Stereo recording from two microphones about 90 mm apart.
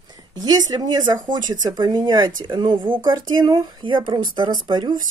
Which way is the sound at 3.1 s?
55° right (ahead or behind).